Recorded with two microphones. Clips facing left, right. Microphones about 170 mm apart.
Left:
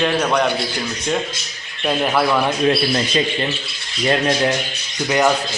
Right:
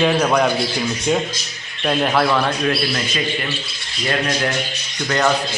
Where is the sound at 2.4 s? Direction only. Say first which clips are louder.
Left 3 dB; 25° left (ahead or behind).